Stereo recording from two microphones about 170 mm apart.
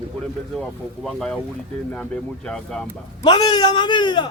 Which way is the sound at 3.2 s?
25° left (ahead or behind).